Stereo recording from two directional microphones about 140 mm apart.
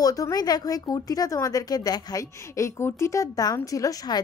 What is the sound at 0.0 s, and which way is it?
Speech, 25° left (ahead or behind).